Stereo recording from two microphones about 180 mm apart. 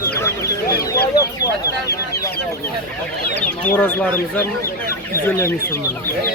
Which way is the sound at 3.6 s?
10° left (ahead or behind).